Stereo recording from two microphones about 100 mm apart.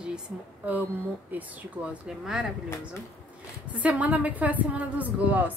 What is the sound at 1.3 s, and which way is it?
Speech, 15° right (ahead or behind).